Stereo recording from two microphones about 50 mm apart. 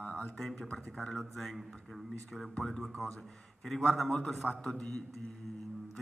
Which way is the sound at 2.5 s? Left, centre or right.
Centre.